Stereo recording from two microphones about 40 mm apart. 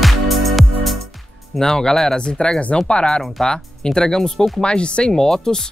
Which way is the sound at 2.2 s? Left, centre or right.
Left.